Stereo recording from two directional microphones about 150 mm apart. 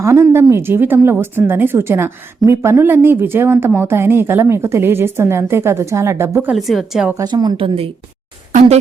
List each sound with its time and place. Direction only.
0.0 s speech: 20° right (ahead or behind)
6.6 s a woman's voice: centre (ahead or behind)
7.1 s a woman's voice: 25° right (ahead or behind)